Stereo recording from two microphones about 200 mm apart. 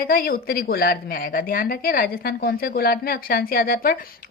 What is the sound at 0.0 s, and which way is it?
A woman's voice, 45° left (ahead or behind).